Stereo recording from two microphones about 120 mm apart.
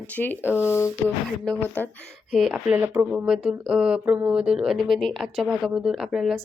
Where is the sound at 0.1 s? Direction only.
15° left (ahead or behind).